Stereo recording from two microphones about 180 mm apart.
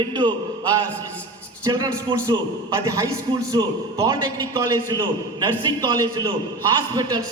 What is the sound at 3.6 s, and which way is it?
A man's voice, 25° right (ahead or behind).